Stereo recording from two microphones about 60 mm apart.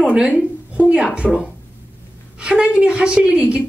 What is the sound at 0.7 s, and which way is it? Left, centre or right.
Speech, centre.